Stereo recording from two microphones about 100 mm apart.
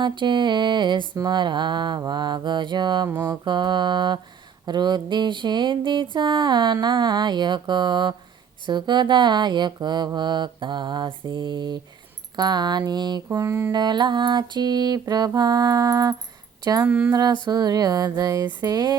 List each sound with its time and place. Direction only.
0.0 s music: 50° right (ahead or behind)
13.3 s mantra: 35° right (ahead or behind)
16.8 s a sound: 15° right (ahead or behind)
17.1 s mantra: 40° right (ahead or behind)
18.6 s music: 45° right (ahead or behind)